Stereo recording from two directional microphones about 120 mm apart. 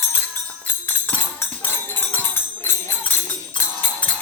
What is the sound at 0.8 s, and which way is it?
Tambourine, 15° left (ahead or behind).